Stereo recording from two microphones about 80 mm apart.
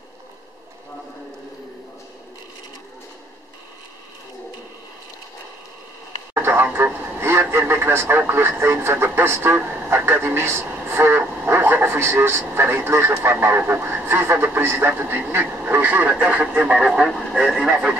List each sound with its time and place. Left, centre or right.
6.3 s speech: right; by 17.9 s centre